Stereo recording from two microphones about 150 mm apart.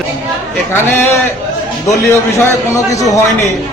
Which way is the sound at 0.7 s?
15° left (ahead or behind).